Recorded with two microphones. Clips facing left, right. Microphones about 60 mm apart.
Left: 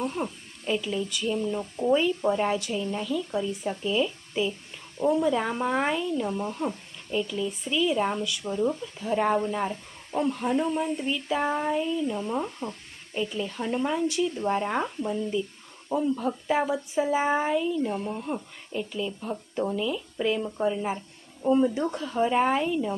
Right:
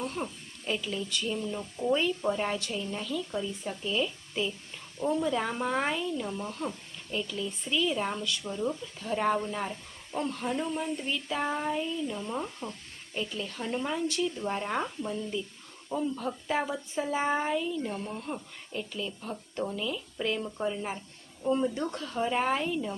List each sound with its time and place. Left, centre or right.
0.0 s speech: centre